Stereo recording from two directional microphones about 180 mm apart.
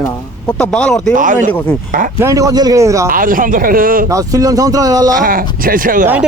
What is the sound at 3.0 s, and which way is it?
Speech, 50° right (ahead or behind).